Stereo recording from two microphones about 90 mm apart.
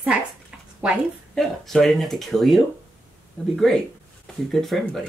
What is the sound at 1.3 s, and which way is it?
Speech, 5° left (ahead or behind).